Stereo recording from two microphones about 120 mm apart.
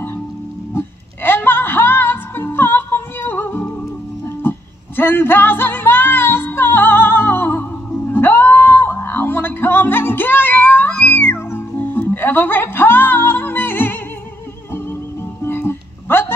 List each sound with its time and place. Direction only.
0.7 s music: 15° left (ahead or behind)
15.4 s music: 20° left (ahead or behind)